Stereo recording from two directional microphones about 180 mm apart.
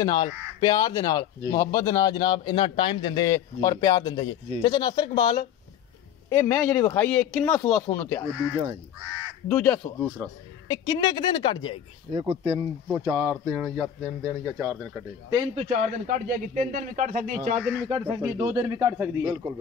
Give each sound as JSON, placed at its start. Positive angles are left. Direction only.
{"t": 0.0, "sound": "a man's voice", "side_deg": 25}
{"t": 7.0, "sound": "speech", "side_deg": 5}
{"t": 9.5, "sound": "a man's voice", "side_deg": 10}
{"t": 12.1, "sound": "speech", "side_deg": -30}
{"t": 12.9, "sound": "speech", "side_deg": -15}
{"t": 15.5, "sound": "a man's voice", "side_deg": -40}
{"t": 17.8, "sound": "speech", "side_deg": -20}